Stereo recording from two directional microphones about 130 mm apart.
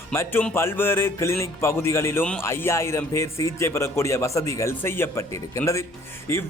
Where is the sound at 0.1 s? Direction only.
20° left (ahead or behind).